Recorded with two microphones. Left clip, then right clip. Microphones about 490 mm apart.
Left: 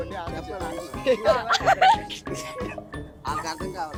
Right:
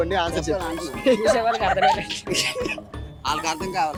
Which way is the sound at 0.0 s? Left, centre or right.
Right.